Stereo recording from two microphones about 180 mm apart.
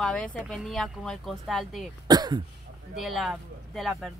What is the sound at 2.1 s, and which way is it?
Speech, 25° right (ahead or behind).